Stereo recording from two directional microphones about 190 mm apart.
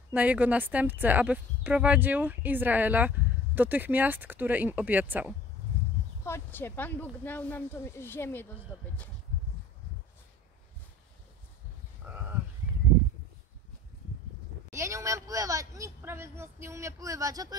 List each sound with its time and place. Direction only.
0.1 s speech: 10° right (ahead or behind)
6.2 s speech: 10° left (ahead or behind)
12.1 s sheep: 10° right (ahead or behind)
12.7 s a sound: 10° right (ahead or behind)
14.7 s speech: 15° right (ahead or behind)